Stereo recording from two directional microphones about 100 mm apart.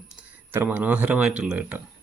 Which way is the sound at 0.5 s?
20° right (ahead or behind).